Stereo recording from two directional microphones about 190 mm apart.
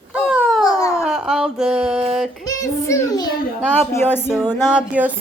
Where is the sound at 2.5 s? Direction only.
15° left (ahead or behind).